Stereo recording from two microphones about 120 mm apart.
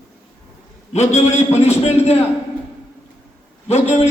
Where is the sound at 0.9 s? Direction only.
70° left (ahead or behind).